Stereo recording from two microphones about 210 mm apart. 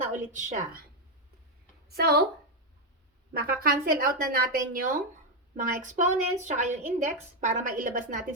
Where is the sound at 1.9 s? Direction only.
50° right (ahead or behind).